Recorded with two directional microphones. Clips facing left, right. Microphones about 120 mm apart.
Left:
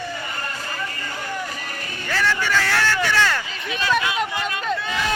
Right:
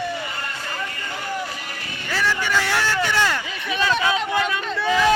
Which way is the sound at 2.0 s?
15° right (ahead or behind).